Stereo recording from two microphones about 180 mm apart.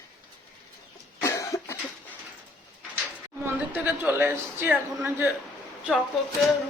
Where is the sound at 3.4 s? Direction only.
10° right (ahead or behind).